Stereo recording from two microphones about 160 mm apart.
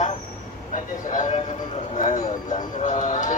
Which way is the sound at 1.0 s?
50° left (ahead or behind).